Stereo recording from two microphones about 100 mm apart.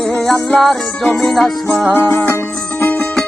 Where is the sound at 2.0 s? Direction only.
20° left (ahead or behind).